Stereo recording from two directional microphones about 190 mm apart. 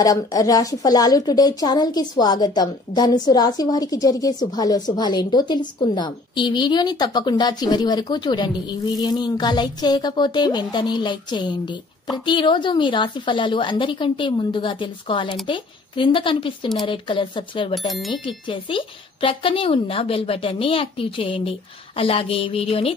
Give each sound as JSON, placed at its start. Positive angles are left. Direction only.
{"t": 0.0, "sound": "a woman's voice", "side_deg": 20}
{"t": 17.7, "sound": "speech", "side_deg": 0}
{"t": 18.2, "sound": "a woman's voice", "side_deg": 25}